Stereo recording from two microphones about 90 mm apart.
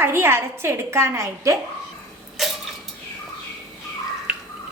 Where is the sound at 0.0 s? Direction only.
25° right (ahead or behind).